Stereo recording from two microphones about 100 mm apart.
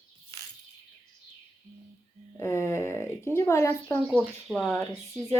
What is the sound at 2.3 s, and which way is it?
Speech, 25° left (ahead or behind).